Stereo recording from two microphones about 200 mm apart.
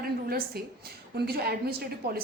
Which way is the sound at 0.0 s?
50° right (ahead or behind).